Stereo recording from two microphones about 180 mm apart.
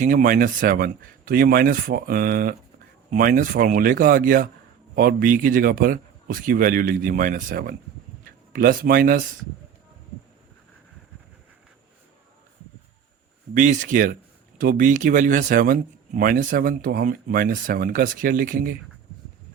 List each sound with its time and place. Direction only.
0.0 s speech: 50° right (ahead or behind)
13.5 s speech: 45° right (ahead or behind)